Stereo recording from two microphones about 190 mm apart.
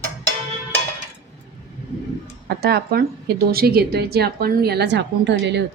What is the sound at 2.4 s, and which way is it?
A woman's voice, 55° right (ahead or behind).